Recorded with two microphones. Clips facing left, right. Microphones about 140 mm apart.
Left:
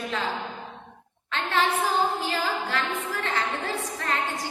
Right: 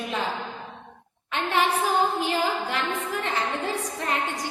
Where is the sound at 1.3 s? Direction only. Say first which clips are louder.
Right 1 dB; 15° right (ahead or behind).